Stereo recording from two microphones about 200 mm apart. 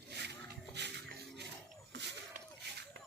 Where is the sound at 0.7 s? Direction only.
60° right (ahead or behind).